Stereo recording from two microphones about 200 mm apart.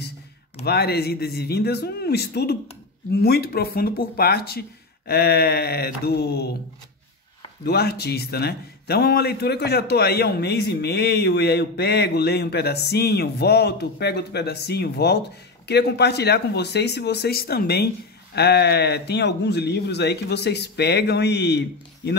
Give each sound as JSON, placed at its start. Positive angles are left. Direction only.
{"t": 0.7, "sound": "a man's voice", "side_deg": 55}
{"t": 7.6, "sound": "a man's voice", "side_deg": 55}